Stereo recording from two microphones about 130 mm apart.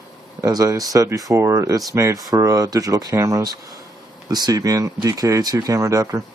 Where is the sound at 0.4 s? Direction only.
25° right (ahead or behind).